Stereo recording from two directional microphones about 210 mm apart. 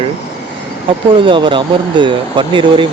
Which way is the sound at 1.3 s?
25° right (ahead or behind).